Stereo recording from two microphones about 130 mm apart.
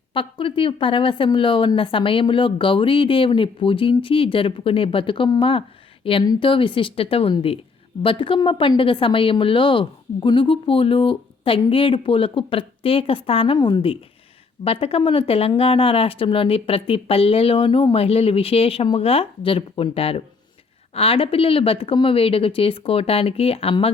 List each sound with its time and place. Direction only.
0.1 s speech: 40° left (ahead or behind)